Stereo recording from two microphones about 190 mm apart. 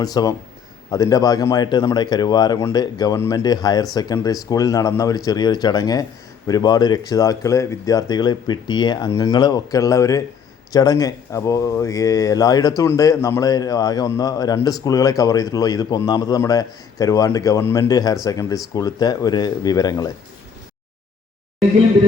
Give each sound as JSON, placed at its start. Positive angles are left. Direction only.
{"t": 0.0, "sound": "a man's voice", "side_deg": 20}